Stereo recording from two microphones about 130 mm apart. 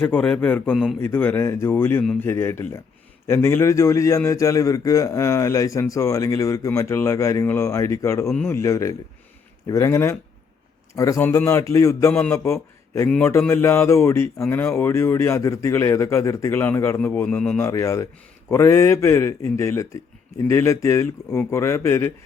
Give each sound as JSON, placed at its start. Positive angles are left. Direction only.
{"t": 0.0, "sound": "a man's voice", "side_deg": 10}
{"t": 17.7, "sound": "a man's voice", "side_deg": 25}